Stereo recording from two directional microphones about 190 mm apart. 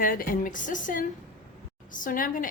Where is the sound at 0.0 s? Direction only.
45° left (ahead or behind).